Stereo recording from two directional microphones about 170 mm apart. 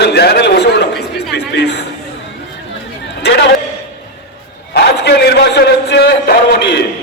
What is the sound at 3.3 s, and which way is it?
Speech, 80° left.